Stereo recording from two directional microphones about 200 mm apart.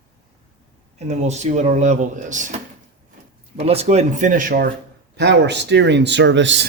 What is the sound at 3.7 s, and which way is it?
Speech, 30° right (ahead or behind).